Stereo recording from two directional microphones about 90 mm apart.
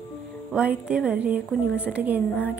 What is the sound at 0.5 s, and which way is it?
A woman's voice, 10° right (ahead or behind).